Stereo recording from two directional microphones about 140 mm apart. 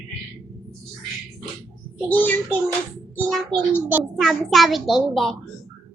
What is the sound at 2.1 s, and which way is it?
Speech, 15° left (ahead or behind).